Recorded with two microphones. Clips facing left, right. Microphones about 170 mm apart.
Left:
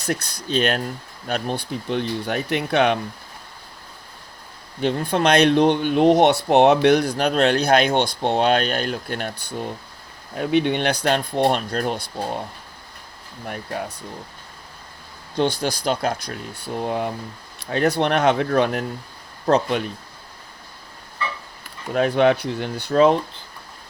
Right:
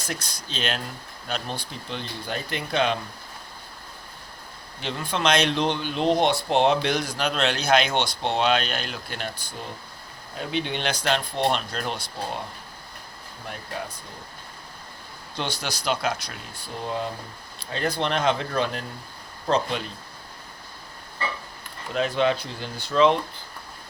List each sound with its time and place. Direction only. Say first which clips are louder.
0.0 s speech: left 8 dB; 65° left (ahead or behind)
4.8 s speech: left 7 dB; 50° left (ahead or behind)
6.1 s speech: left 6 dB; 70° left (ahead or behind)
7.3 s speech: left 5 dB; 50° left (ahead or behind)
13.5 s speech: left 5 dB; 55° left (ahead or behind)
15.4 s speech: left 9 dB; 50° left (ahead or behind)
16.6 s speech: left 5 dB; 60° left (ahead or behind)
21.9 s speech: left 6 dB; 55° left (ahead or behind)